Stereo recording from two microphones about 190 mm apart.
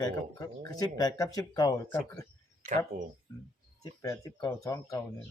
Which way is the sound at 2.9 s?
45° right (ahead or behind).